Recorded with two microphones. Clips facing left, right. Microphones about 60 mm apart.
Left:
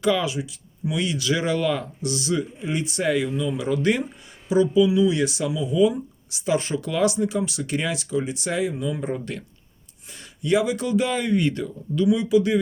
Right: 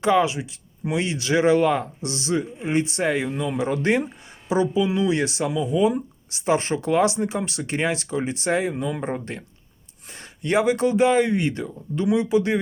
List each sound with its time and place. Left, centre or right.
0.0 s speech: right
3.2 s speech: right
3.6 s speech: right
8.7 s speech: right
9.3 s speech: right
10.1 s speech: right